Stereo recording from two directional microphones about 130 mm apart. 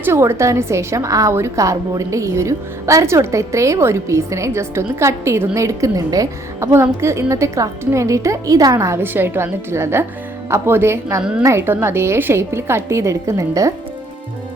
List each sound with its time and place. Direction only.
0.0 s a woman's voice: 20° right (ahead or behind)